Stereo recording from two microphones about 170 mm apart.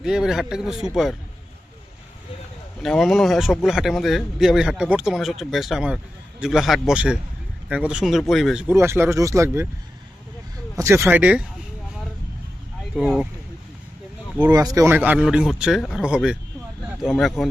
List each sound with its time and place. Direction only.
0.0 s speech: 5° right (ahead or behind)
2.8 s speech: centre (ahead or behind)
8.6 s speech: 15° right (ahead or behind)
10.8 s speech: 15° right (ahead or behind)
13.0 s speech: 5° right (ahead or behind)
14.5 s speech: 20° right (ahead or behind); by 17.5 s centre (ahead or behind)